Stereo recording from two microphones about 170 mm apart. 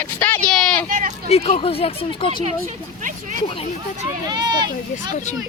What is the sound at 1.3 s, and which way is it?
Speech, 35° left (ahead or behind).